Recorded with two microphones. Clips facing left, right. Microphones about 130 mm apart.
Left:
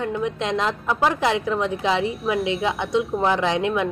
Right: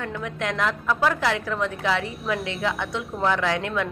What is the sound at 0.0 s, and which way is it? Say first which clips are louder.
A woman's voice: left 5 dB; 20° left (ahead or behind).